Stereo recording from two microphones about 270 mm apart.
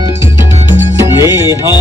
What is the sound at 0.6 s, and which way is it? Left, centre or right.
Music, centre.